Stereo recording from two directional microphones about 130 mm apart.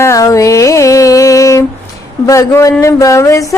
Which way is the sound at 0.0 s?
25° left (ahead or behind).